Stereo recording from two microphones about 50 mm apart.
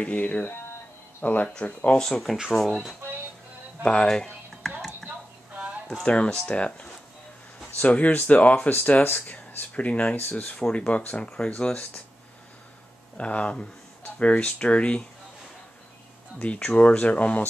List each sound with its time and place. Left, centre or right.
0.0 s speech: left
2.5 s speech: centre
3.8 s speech: centre
6.0 s speech: left
8.1 s speech: left
8.4 s speech: left
9.8 s speech: left
13.2 s speech: left
16.5 s speech: left